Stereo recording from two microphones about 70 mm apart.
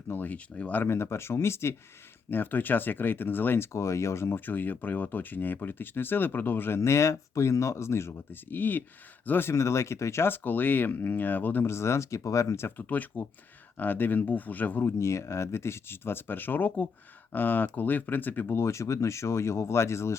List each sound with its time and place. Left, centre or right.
0.1 s speech: left
0.9 s speech: left
11.7 s speech: left
12.9 s speech: left
14.8 s speech: left